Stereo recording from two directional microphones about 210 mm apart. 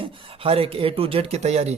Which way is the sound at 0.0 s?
25° right (ahead or behind).